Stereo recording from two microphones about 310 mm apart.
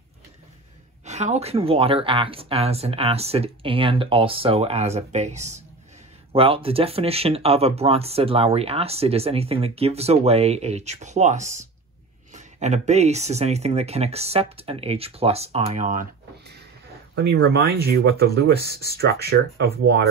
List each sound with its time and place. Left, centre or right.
1.0 s speech: right
18.6 s speech: centre
18.9 s speech: right